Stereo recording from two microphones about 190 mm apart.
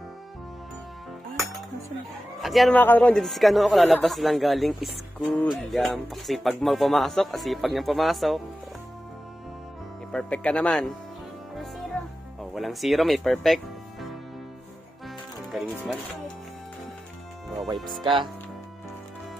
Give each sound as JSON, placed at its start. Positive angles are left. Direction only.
{"t": 2.4, "sound": "speech", "side_deg": 0}
{"t": 10.1, "sound": "speech", "side_deg": 5}
{"t": 12.5, "sound": "speech", "side_deg": 0}
{"t": 15.5, "sound": "music", "side_deg": -5}
{"t": 18.0, "sound": "speech", "side_deg": -25}